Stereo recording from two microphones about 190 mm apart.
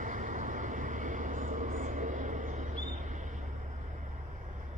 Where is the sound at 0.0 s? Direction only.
45° right (ahead or behind).